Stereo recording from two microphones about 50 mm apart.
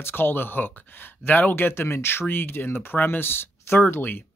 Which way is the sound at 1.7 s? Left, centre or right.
Left.